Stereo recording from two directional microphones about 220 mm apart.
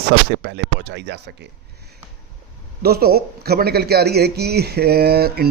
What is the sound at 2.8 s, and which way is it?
Speech, 45° right (ahead or behind).